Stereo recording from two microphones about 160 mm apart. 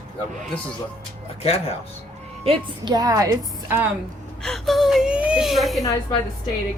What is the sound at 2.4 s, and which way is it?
A woman's voice, 30° right (ahead or behind).